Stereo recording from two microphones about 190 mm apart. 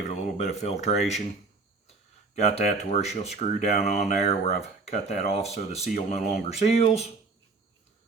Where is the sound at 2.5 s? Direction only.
35° left (ahead or behind).